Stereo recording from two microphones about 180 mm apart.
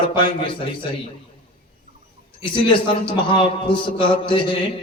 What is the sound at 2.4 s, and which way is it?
A man's voice, 30° left (ahead or behind).